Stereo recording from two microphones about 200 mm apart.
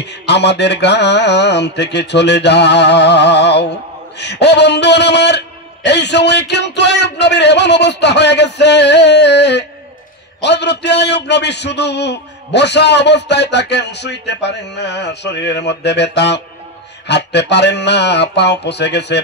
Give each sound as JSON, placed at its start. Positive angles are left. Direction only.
{"t": 0.0, "sound": "a man's voice", "side_deg": 60}